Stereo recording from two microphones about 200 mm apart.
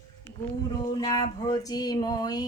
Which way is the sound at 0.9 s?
20° left (ahead or behind).